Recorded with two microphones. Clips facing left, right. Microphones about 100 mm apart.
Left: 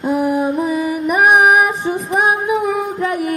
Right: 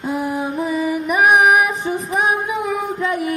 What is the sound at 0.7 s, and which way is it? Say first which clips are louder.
Music: left 2 dB; 40° left (ahead or behind).